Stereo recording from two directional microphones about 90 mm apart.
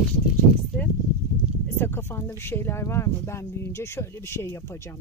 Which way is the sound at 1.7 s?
25° left (ahead or behind).